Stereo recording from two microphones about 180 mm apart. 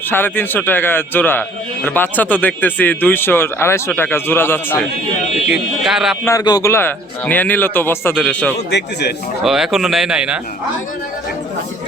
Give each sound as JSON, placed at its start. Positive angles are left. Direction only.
{"t": 0.1, "sound": "a man's voice", "side_deg": 10}
{"t": 5.5, "sound": "speech", "side_deg": -5}
{"t": 6.2, "sound": "a man's voice", "side_deg": 20}
{"t": 8.7, "sound": "a man's voice", "side_deg": 70}
{"t": 9.4, "sound": "speech", "side_deg": 0}